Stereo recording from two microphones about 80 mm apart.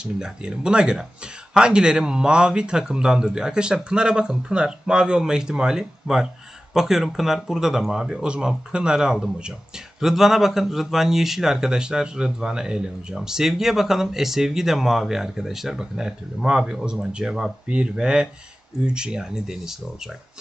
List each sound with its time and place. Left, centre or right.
0.0 s speech: centre